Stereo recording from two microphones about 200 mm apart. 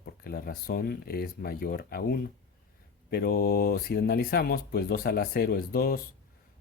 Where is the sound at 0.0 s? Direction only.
50° left (ahead or behind).